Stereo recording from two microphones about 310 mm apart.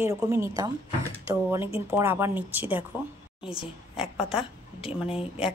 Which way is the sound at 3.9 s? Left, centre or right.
Centre.